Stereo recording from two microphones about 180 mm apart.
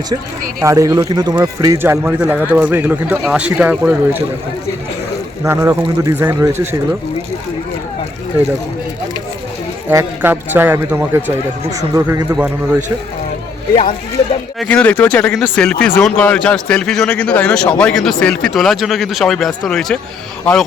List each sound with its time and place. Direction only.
0.6 s speech: 20° right (ahead or behind)
5.5 s speech: 15° right (ahead or behind)
9.9 s speech: 15° right (ahead or behind)
14.6 s a man's voice: 5° left (ahead or behind)